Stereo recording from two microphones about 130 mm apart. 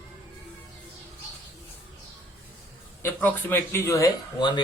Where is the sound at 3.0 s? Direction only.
15° left (ahead or behind); by 4.6 s 35° left (ahead or behind).